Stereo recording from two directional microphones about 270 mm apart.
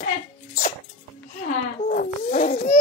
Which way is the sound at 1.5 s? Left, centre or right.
Left.